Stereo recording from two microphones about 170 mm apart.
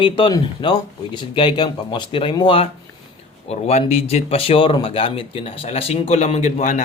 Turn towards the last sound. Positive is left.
turn(degrees=45)  # may be behind; listen again after turning